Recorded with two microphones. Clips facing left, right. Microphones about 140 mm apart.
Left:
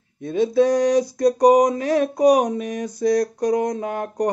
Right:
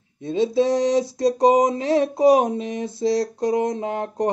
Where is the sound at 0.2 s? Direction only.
25° right (ahead or behind).